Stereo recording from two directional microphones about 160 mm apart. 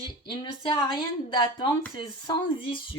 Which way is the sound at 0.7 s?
25° left (ahead or behind).